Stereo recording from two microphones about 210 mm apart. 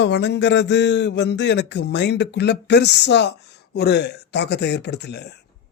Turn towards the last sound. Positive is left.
turn(degrees=55)  # may be behind; listen again after turning